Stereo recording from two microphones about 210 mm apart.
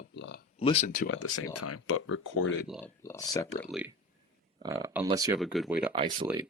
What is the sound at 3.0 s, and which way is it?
Speech, 15° left (ahead or behind).